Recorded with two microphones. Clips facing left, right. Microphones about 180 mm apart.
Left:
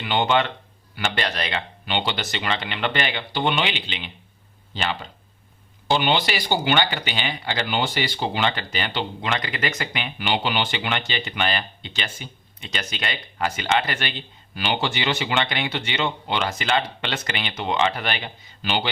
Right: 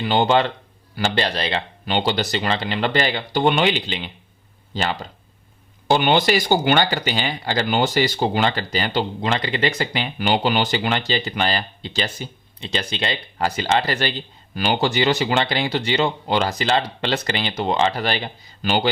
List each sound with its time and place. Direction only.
0.0 s speech: 35° right (ahead or behind)